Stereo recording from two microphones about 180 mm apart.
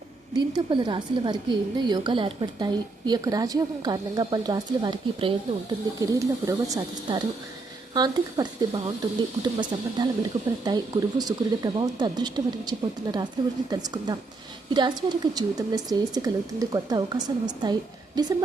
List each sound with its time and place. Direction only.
0.3 s a woman's voice: 25° right (ahead or behind)